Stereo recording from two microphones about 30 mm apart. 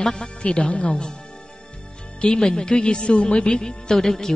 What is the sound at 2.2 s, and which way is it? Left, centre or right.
Speech, left.